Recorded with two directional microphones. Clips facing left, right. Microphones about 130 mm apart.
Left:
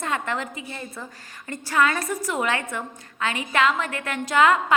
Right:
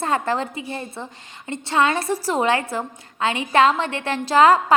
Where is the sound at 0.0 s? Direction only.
35° right (ahead or behind).